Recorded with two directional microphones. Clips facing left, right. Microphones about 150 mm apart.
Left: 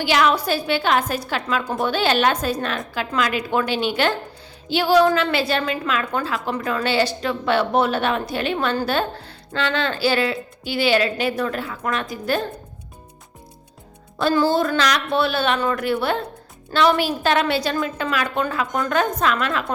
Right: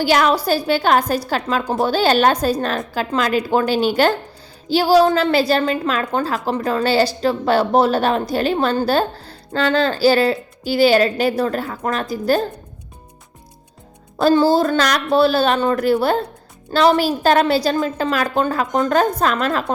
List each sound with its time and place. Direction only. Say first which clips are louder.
0.0 s a woman's voice: right 3 dB; 40° right (ahead or behind)
14.2 s a woman's voice: right 5 dB; 35° right (ahead or behind)